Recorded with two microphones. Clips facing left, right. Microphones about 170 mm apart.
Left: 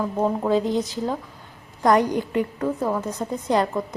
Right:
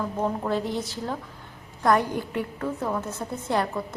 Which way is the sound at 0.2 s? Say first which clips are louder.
Left 6 dB; 15° left (ahead or behind).